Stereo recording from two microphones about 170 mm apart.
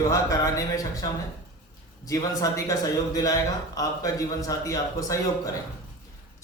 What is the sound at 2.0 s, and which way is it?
A man's voice, 20° left (ahead or behind).